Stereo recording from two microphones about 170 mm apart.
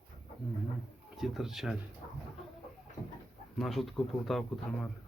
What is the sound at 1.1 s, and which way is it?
Speech, centre (ahead or behind).